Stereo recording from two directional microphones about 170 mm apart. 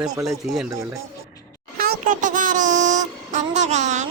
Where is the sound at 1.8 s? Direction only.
55° right (ahead or behind).